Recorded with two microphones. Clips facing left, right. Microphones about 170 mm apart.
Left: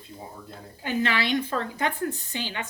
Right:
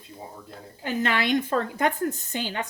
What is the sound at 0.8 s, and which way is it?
A woman's voice, 45° right (ahead or behind).